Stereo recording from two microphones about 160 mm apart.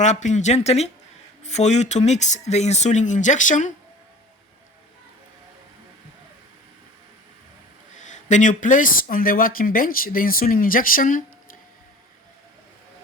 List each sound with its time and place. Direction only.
0.0 s speech: 50° left (ahead or behind)
7.9 s speech: 50° left (ahead or behind)